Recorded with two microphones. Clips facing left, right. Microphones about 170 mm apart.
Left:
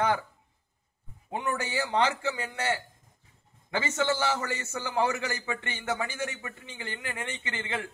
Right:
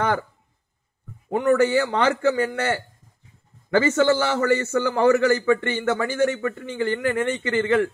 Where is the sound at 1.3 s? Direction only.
55° right (ahead or behind).